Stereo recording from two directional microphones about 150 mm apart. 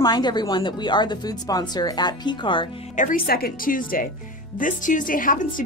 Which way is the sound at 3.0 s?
70° left (ahead or behind).